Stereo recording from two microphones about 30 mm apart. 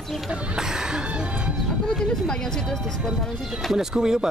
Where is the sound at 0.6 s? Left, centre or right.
Right.